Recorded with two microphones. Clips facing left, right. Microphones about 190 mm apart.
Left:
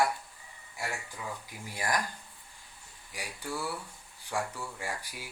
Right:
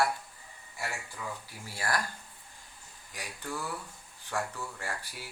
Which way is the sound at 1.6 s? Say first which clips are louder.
Left 1 dB; 15° left (ahead or behind).